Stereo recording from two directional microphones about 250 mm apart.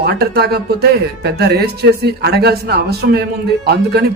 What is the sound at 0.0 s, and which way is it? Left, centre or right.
Speech, right.